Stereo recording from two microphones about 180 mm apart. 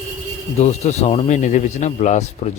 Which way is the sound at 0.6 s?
40° left (ahead or behind).